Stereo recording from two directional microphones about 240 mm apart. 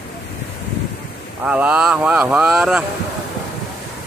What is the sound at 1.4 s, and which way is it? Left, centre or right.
Speech, centre.